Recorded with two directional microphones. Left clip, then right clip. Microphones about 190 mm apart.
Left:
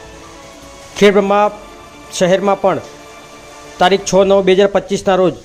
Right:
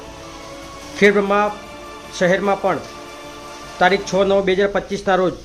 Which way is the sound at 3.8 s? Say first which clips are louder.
Left 5 dB; 35° left (ahead or behind).